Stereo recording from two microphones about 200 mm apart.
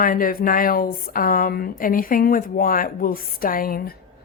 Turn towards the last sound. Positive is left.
turn(degrees=45)  # may be behind; listen again after turning